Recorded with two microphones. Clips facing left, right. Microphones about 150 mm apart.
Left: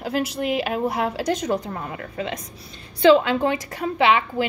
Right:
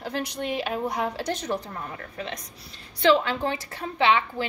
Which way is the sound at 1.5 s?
45° left (ahead or behind).